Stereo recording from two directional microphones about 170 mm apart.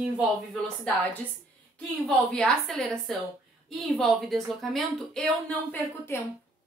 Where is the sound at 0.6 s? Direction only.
5° left (ahead or behind).